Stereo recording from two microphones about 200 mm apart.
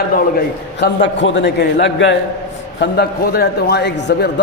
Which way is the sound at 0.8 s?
65° left (ahead or behind).